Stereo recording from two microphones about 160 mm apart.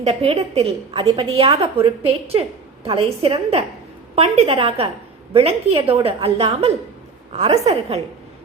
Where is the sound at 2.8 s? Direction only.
35° right (ahead or behind).